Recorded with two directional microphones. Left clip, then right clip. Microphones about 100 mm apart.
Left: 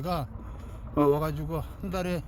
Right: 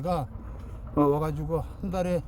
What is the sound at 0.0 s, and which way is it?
Speech, 40° right (ahead or behind).